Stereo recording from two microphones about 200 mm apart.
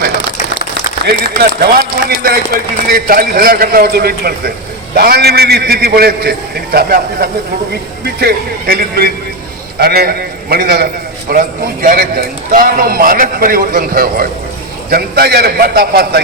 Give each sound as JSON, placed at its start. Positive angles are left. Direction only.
{"t": 1.0, "sound": "speech", "side_deg": -50}
{"t": 8.0, "sound": "speech", "side_deg": -50}